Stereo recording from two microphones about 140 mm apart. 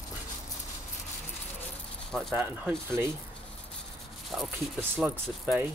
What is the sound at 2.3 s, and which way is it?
Speech, 15° right (ahead or behind).